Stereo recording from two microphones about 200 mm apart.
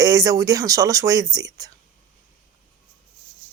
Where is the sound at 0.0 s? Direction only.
15° right (ahead or behind).